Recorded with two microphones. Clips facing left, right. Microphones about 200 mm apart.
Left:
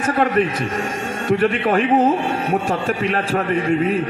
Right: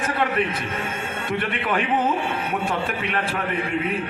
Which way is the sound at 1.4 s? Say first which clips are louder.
Left 8 dB; 35° left (ahead or behind).